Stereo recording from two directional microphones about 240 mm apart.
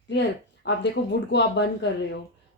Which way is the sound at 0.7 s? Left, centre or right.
Left.